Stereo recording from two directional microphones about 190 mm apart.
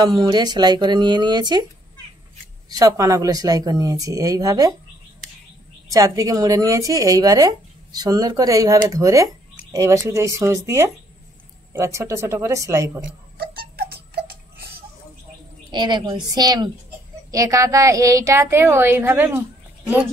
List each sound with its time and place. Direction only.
0.0 s speech: 20° right (ahead or behind)
2.7 s speech: 20° right (ahead or behind)
5.9 s speech: 20° right (ahead or behind)
13.4 s music: 55° right (ahead or behind)
15.7 s speech: 25° right (ahead or behind)